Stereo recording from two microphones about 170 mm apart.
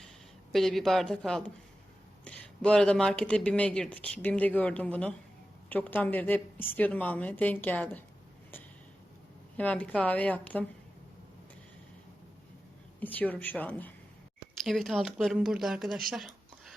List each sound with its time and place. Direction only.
0.5 s speech: centre (ahead or behind)
9.6 s speech: 10° left (ahead or behind)
13.0 s speech: 10° left (ahead or behind)